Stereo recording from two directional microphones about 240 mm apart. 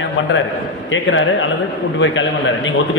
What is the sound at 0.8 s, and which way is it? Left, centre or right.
A man's voice, left.